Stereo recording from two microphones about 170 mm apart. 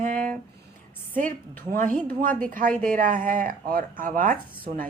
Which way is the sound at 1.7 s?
50° right (ahead or behind).